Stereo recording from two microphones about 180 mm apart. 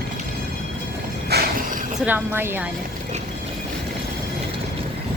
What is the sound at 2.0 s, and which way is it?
Speech, 10° right (ahead or behind).